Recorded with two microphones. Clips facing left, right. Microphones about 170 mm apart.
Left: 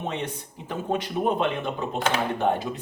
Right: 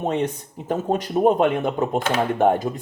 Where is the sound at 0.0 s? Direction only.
45° right (ahead or behind).